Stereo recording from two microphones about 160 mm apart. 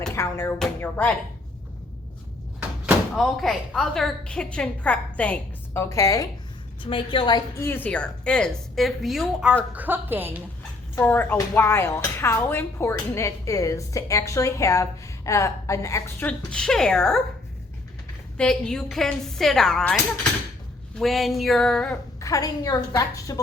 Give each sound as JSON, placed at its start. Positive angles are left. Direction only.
{"t": 0.1, "sound": "music", "side_deg": 15}
{"t": 0.8, "sound": "speech", "side_deg": 10}
{"t": 2.6, "sound": "speech", "side_deg": -5}
{"t": 6.8, "sound": "a woman's voice", "side_deg": 30}
{"t": 7.6, "sound": "a woman's voice", "side_deg": 15}
{"t": 10.9, "sound": "speech", "side_deg": 10}
{"t": 16.5, "sound": "a woman's voice", "side_deg": 5}
{"t": 18.3, "sound": "a woman's voice", "side_deg": 5}
{"t": 21.0, "sound": "a woman's voice", "side_deg": 0}
{"t": 22.2, "sound": "speech", "side_deg": 20}